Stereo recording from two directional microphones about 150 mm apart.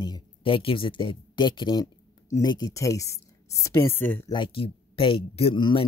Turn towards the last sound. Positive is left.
turn(degrees=35)  # may be behind; listen again after turning